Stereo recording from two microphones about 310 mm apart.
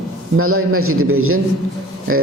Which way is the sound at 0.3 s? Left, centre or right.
Right.